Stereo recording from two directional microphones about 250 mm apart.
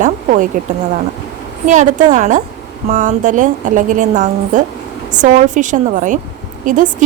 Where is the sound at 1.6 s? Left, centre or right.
Right.